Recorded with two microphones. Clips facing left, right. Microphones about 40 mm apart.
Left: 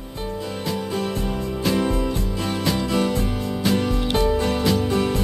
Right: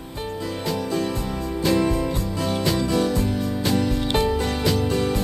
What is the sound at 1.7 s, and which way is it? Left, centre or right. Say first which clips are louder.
Music: right 1 dB; left.